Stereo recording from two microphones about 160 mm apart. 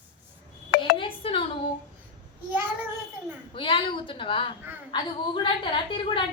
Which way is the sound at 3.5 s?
35° left (ahead or behind).